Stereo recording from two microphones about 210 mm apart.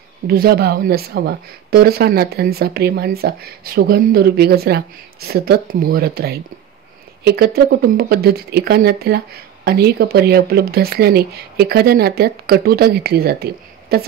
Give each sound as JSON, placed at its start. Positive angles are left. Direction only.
{"t": 0.3, "sound": "speech", "side_deg": -45}